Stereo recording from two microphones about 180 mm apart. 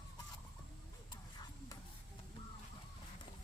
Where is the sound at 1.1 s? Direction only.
20° left (ahead or behind).